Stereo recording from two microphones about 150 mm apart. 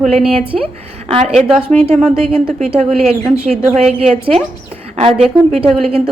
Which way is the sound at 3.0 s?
45° right (ahead or behind).